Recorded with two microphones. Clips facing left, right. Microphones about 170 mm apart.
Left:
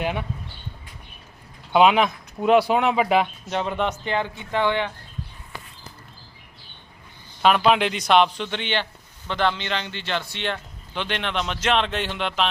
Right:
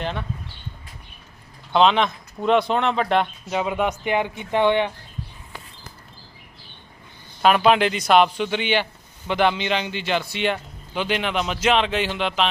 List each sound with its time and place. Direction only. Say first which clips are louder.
0.0 s speech: left 2 dB; 10° left (ahead or behind)
1.7 s speech: left 1 dB; 10° left (ahead or behind)
3.6 s speech: right 2 dB; 10° right (ahead or behind)
7.4 s speech: right 2 dB; centre (ahead or behind)